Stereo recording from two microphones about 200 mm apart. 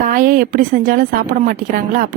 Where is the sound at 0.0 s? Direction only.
45° right (ahead or behind).